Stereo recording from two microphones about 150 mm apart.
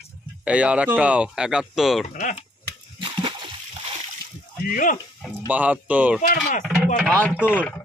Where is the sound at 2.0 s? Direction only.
50° left (ahead or behind).